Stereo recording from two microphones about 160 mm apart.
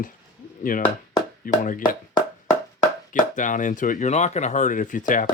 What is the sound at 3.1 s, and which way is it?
Speech, 55° left (ahead or behind).